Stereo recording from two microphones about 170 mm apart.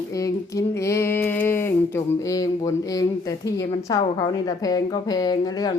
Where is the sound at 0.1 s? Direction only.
20° left (ahead or behind).